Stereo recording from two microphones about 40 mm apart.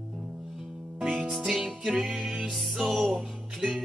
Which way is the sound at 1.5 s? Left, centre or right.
Centre.